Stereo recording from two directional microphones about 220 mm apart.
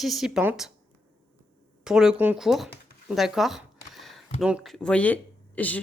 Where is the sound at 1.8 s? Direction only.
5° right (ahead or behind).